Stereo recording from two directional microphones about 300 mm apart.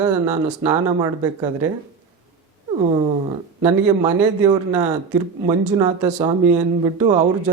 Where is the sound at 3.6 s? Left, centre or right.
Centre.